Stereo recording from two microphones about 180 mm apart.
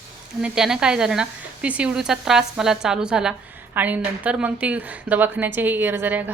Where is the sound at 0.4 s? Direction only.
5° right (ahead or behind).